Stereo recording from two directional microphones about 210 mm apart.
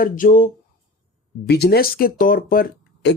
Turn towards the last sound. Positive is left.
turn(degrees=45)  # may be behind; listen again after turning